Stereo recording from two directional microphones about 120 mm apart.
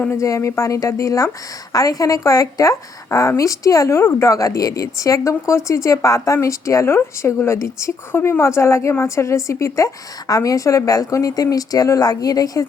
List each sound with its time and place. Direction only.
0.0 s a woman's voice: 25° left (ahead or behind)